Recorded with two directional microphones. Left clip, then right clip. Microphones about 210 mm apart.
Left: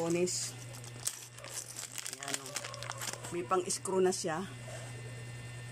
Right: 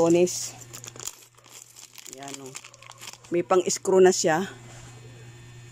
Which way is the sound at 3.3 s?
40° right (ahead or behind).